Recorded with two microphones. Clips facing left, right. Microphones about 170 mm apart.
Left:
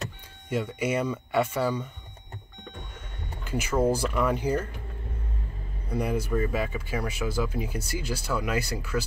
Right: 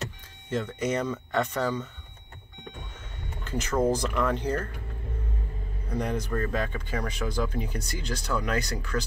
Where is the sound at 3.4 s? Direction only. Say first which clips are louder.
Left 1 dB; 10° left (ahead or behind).